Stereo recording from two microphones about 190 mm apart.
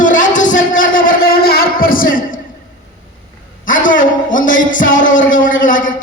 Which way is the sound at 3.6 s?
45° left (ahead or behind).